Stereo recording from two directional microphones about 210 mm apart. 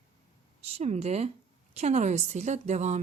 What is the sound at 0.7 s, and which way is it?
A woman's voice, 30° right (ahead or behind).